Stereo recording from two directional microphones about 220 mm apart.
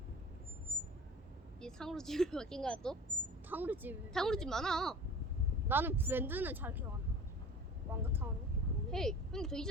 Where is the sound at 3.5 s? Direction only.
10° right (ahead or behind).